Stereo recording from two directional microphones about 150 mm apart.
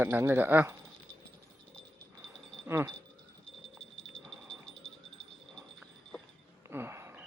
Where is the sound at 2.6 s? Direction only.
15° right (ahead or behind).